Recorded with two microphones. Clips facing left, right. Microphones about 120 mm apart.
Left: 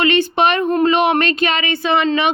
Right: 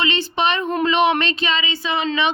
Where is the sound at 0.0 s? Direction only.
50° left (ahead or behind).